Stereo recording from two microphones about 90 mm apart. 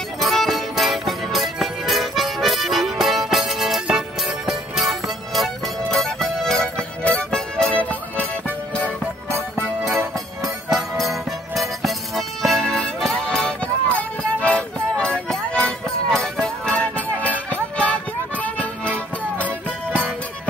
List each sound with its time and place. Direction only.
0.2 s music: centre (ahead or behind)
9.8 s music: 30° right (ahead or behind)
10.7 s music: centre (ahead or behind)